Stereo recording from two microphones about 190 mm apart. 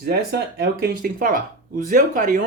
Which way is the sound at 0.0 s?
60° right (ahead or behind).